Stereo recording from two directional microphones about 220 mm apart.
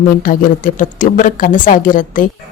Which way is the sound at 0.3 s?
40° left (ahead or behind).